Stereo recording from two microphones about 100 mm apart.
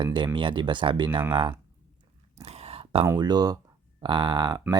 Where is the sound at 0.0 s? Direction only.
50° right (ahead or behind).